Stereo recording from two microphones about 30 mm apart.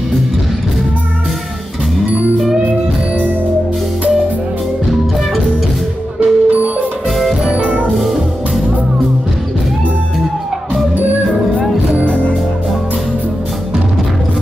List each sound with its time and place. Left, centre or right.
6.1 s music: right
7.9 s music: centre
12.1 s music: left